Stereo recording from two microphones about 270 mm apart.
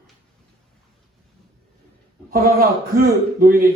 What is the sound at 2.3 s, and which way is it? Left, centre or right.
A man's voice, right.